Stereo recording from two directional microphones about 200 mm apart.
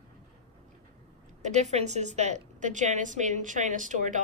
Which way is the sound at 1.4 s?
35° right (ahead or behind).